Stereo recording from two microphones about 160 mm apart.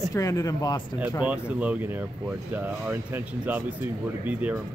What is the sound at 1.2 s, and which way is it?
Speech, 10° right (ahead or behind).